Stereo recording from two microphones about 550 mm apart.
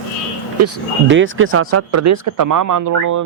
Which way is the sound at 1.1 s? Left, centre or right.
Right.